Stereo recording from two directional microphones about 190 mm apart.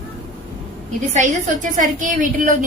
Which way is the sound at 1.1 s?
40° right (ahead or behind).